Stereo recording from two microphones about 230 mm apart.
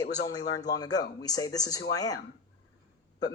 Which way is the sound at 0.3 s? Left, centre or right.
Centre.